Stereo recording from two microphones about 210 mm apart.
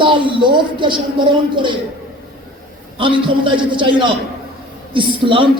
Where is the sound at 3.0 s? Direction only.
25° right (ahead or behind).